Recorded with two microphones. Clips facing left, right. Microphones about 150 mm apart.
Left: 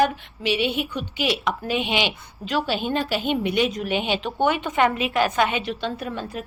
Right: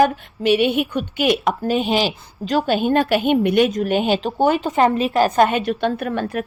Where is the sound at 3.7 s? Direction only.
45° right (ahead or behind).